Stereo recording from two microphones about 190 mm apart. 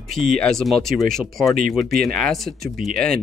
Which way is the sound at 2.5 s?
55° right (ahead or behind).